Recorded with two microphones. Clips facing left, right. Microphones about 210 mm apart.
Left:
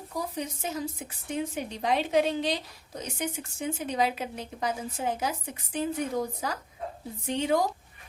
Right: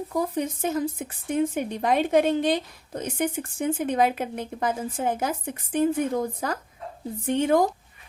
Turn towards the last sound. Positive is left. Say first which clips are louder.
# right 5 dB
turn(degrees=-50)  # may be behind; listen again after turning